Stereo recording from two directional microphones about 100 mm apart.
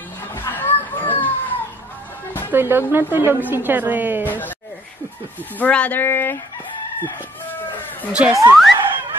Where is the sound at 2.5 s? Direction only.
20° right (ahead or behind).